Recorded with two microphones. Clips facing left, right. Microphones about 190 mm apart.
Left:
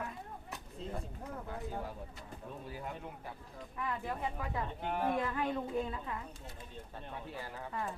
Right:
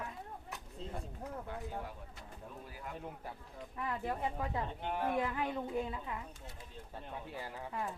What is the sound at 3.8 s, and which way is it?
Speech, 30° right (ahead or behind).